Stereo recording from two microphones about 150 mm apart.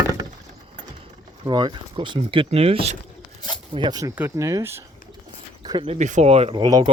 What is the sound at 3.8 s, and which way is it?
Speech, 30° right (ahead or behind).